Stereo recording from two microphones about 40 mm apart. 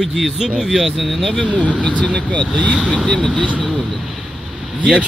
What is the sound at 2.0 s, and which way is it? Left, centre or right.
Speech, left.